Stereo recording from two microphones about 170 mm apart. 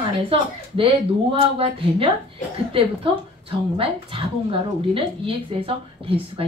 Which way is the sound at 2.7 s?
30° right (ahead or behind).